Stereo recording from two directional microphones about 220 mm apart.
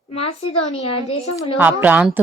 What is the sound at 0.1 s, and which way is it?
A woman's voice, 25° left (ahead or behind).